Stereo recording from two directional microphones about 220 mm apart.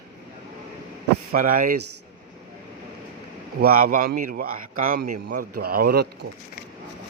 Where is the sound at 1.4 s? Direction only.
40° right (ahead or behind).